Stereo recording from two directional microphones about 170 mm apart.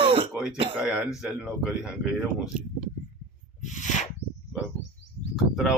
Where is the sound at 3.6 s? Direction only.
45° left (ahead or behind).